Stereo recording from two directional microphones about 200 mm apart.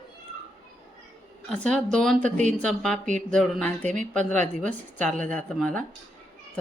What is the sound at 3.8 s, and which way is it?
Speech, 40° right (ahead or behind).